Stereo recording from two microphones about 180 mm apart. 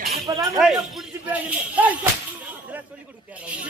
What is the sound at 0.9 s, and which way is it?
Speech, 5° right (ahead or behind).